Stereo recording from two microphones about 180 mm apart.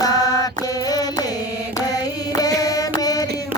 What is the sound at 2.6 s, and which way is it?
Mantra, 20° left (ahead or behind).